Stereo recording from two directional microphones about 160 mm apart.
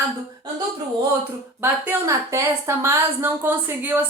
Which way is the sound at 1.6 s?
15° right (ahead or behind).